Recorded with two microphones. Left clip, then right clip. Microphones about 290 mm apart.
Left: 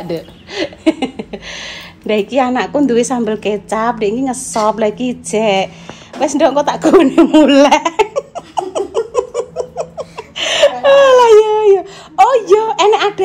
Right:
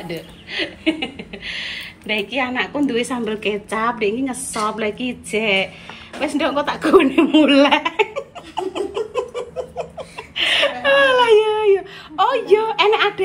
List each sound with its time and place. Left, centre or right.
0.1 s a sound: centre
2.2 s a woman's voice: centre
6.1 s baby laughter: centre